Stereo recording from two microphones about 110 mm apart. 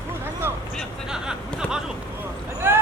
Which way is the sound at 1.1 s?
5° right (ahead or behind).